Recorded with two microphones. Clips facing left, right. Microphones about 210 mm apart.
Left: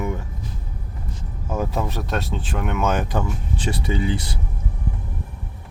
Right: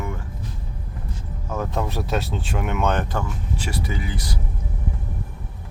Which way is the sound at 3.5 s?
30° left (ahead or behind).